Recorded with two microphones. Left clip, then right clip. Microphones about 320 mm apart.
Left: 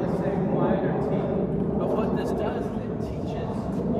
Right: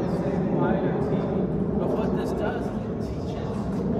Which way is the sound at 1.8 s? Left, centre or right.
Left.